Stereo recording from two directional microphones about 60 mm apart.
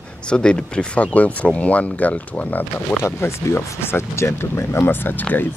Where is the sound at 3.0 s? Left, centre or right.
Left.